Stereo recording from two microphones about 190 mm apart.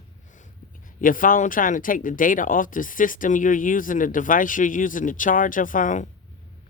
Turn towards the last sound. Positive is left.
turn(degrees=45)  # may be behind; listen again after turning